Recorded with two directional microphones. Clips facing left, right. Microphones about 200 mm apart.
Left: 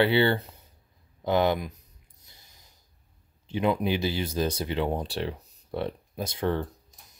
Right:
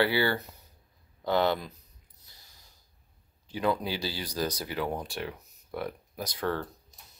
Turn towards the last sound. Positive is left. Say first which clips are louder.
# left 4 dB
turn(degrees=20)  # may be behind; listen again after turning